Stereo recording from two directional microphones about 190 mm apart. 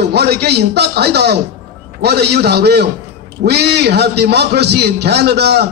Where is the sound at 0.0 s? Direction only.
60° right (ahead or behind).